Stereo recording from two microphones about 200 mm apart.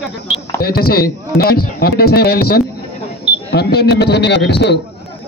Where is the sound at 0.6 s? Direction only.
50° left (ahead or behind).